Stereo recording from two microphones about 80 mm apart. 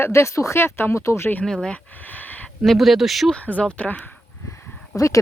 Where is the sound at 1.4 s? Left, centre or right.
Centre.